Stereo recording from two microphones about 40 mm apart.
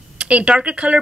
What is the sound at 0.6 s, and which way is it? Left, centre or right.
Speech, right.